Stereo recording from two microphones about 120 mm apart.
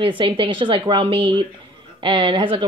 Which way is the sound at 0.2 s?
45° right (ahead or behind).